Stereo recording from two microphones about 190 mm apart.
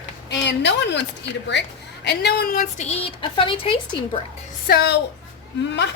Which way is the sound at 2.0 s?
60° left (ahead or behind).